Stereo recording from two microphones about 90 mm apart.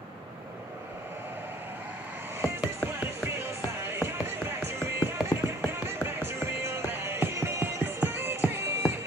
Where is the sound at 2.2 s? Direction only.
25° right (ahead or behind).